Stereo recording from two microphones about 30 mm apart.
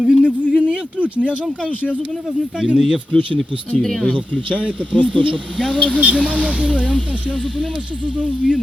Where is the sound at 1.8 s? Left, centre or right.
Left.